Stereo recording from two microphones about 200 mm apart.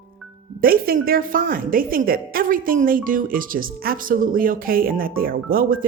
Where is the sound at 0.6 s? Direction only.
45° right (ahead or behind).